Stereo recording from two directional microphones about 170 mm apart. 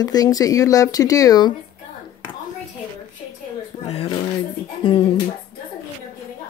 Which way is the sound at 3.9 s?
35° left (ahead or behind).